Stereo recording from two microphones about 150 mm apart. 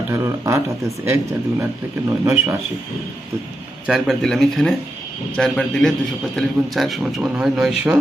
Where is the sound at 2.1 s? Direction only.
20° right (ahead or behind).